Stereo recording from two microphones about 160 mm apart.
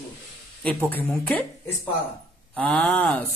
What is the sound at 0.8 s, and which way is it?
Speech, 10° left (ahead or behind).